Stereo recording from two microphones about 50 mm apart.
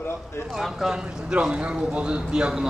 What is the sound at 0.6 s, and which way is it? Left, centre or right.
Speech, centre.